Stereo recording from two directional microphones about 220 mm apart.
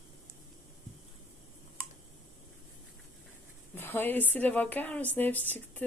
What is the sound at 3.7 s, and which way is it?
Speech, 10° left (ahead or behind).